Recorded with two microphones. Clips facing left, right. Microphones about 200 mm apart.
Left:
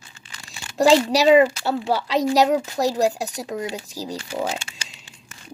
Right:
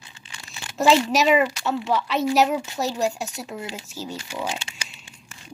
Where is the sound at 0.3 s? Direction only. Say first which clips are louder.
Right 1 dB; 35° left (ahead or behind).